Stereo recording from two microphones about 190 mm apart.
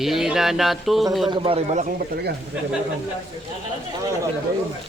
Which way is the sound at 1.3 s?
30° right (ahead or behind).